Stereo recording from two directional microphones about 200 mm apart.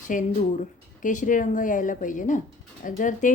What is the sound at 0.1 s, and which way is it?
A woman's voice, 40° left (ahead or behind).